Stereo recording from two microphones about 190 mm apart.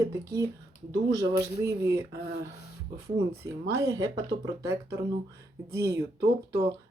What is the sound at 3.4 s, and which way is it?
Speech, 15° right (ahead or behind).